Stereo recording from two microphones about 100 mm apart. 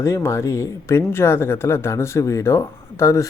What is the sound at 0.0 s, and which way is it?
Speech, 30° left (ahead or behind).